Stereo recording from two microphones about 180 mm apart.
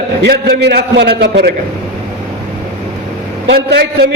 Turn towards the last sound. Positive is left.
turn(degrees=-65)  # may be behind; listen again after turning